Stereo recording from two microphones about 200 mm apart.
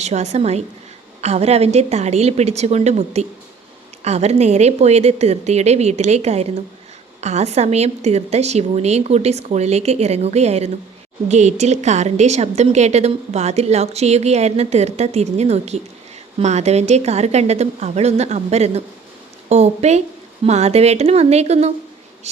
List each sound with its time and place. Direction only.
0.0 s a woman's voice: 35° right (ahead or behind)